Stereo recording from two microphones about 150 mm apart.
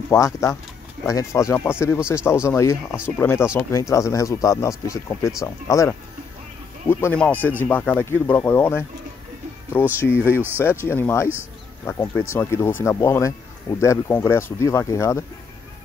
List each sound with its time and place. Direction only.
0.1 s speech: 20° left (ahead or behind)
9.9 s speech: 15° left (ahead or behind)
10.2 s speech: 10° right (ahead or behind)
10.6 s speech: 15° left (ahead or behind)